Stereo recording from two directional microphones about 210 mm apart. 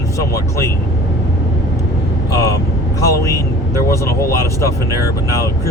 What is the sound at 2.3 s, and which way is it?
Speech, 15° left (ahead or behind).